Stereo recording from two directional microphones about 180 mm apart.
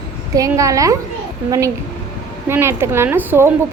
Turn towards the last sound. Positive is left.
turn(degrees=-10)  # may be behind; listen again after turning